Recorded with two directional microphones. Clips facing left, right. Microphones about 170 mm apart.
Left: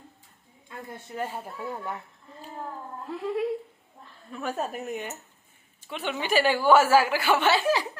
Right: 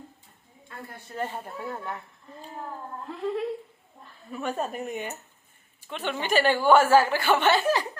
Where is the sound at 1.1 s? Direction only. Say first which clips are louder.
Right 1 dB; 5° left (ahead or behind).